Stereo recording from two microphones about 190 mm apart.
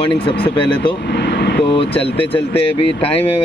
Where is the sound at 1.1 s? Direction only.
60° left (ahead or behind).